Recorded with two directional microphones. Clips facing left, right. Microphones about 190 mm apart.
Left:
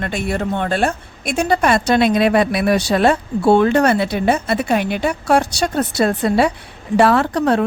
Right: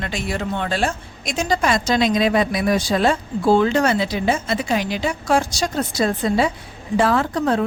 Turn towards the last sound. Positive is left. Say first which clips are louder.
# left 3 dB
turn(degrees=70)  # may be behind; listen again after turning